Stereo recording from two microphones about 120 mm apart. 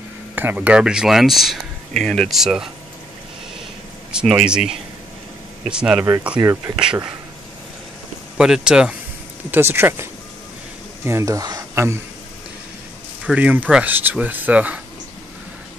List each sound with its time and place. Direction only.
0.4 s speech: 15° right (ahead or behind)
4.1 s speech: 5° right (ahead or behind)
6.4 s speech: 20° right (ahead or behind)
8.4 s speech: 5° right (ahead or behind)
9.5 s speech: 20° right (ahead or behind)
11.1 s speech: 25° right (ahead or behind)
13.2 s speech: 10° right (ahead or behind)